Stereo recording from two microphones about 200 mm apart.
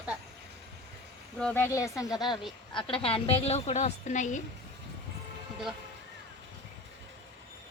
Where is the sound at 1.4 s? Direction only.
10° left (ahead or behind); by 4.4 s 35° left (ahead or behind).